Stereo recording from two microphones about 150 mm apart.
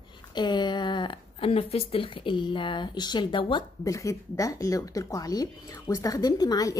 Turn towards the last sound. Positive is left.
turn(degrees=25)  # may be behind; listen again after turning